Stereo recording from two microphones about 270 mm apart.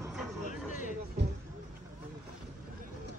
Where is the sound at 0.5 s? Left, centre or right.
Left.